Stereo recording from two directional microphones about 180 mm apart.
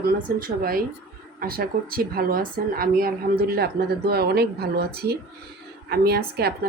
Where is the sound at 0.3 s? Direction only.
55° right (ahead or behind).